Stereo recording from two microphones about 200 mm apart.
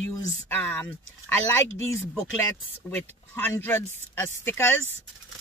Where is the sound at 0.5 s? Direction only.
10° left (ahead or behind).